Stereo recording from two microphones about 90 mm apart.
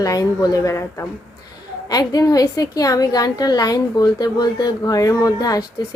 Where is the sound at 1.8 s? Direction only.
45° left (ahead or behind).